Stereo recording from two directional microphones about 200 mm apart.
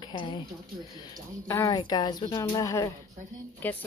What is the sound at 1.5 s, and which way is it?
A woman's voice, 15° left (ahead or behind).